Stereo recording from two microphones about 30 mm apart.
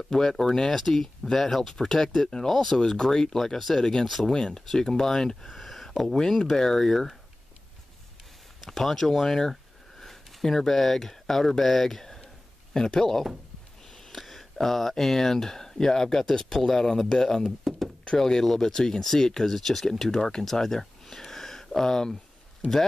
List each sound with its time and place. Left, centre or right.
0.0 s speech: centre
2.9 s speech: centre
4.0 s speech: centre
4.3 s speech: left
5.5 s a sound: centre
6.3 s speech: centre
8.6 s speech: centre
9.5 s a sound: centre
12.7 s speech: centre
13.8 s a sound: centre
14.2 s speech: centre